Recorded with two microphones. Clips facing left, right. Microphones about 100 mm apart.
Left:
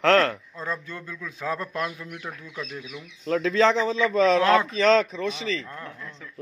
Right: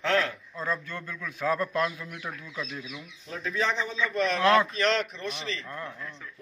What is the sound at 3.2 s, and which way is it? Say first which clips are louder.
Speech: left 9 dB; 90° left.